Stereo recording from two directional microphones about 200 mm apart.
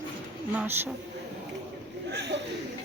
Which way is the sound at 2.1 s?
60° right (ahead or behind).